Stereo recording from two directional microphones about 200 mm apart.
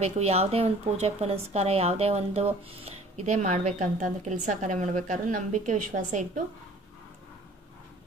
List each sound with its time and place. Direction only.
0.0 s speech: 30° right (ahead or behind)